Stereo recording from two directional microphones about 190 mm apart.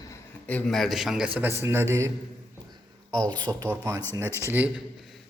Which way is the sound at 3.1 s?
25° right (ahead or behind).